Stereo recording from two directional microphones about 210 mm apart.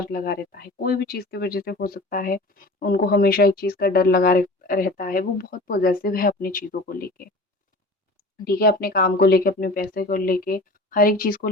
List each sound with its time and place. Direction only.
0.0 s speech: 45° left (ahead or behind)
8.4 s speech: 45° left (ahead or behind)